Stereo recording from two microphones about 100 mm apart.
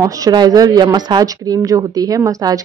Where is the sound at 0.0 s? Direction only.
40° right (ahead or behind).